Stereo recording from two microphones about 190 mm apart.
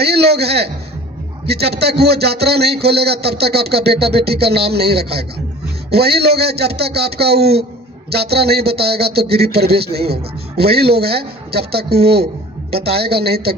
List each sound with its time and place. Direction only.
0.0 s a man's voice: 60° right (ahead or behind)